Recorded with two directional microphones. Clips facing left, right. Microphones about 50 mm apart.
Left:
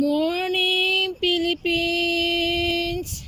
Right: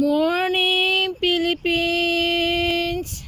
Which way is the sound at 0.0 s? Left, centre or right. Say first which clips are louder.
Right 3 dB; right.